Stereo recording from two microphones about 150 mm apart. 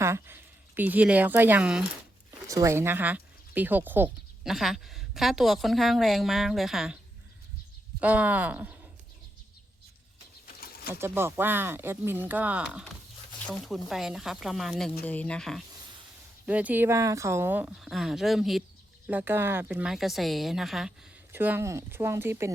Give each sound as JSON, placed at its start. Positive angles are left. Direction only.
{"t": 0.0, "sound": "speech", "side_deg": -15}
{"t": 2.5, "sound": "speech", "side_deg": -20}
{"t": 4.5, "sound": "a woman's voice", "side_deg": 0}
{"t": 8.0, "sound": "speech", "side_deg": -10}
{"t": 11.0, "sound": "a woman's voice", "side_deg": -15}
{"t": 16.5, "sound": "speech", "side_deg": -10}
{"t": 17.7, "sound": "a woman's voice", "side_deg": 0}
{"t": 19.0, "sound": "a woman's voice", "side_deg": -10}
{"t": 21.3, "sound": "speech", "side_deg": -15}